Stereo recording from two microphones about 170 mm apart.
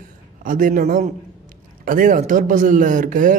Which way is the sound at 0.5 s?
55° right (ahead or behind).